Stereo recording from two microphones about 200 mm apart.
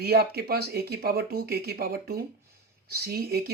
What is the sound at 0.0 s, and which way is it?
Speech, 50° right (ahead or behind).